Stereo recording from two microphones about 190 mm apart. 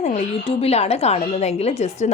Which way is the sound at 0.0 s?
35° left (ahead or behind).